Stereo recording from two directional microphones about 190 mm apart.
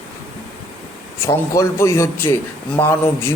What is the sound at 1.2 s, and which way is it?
A man's voice, 15° left (ahead or behind).